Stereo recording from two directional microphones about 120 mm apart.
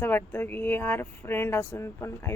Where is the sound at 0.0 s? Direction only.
20° left (ahead or behind).